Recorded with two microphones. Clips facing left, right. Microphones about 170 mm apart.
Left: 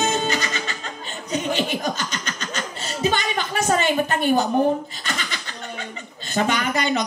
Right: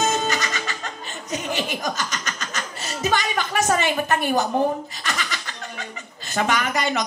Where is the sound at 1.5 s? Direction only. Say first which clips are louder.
Even; 30° left (ahead or behind).